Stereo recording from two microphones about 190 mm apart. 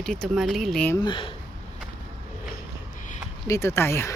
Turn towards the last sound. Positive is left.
turn(degrees=15)  # may be behind; listen again after turning